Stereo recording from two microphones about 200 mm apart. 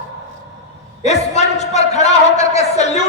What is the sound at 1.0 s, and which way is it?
A man's voice, 35° left (ahead or behind).